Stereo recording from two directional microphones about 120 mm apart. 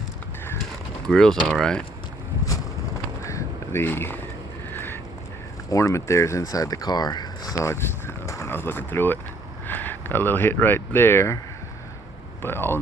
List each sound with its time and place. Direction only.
1.0 s speech: 5° left (ahead or behind)
3.2 s a sound: 20° left (ahead or behind)
5.7 s speech: 25° left (ahead or behind)
12.4 s speech: 20° left (ahead or behind)